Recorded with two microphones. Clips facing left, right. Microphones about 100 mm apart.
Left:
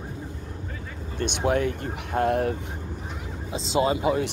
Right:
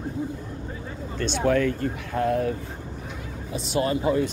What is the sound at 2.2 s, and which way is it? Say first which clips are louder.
Speech: left 1 dB; 35° left (ahead or behind).